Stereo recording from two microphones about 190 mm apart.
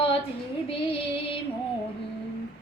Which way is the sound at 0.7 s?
30° left (ahead or behind).